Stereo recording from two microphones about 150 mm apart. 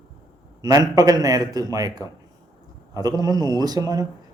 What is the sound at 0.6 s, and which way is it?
A man's voice, 25° right (ahead or behind).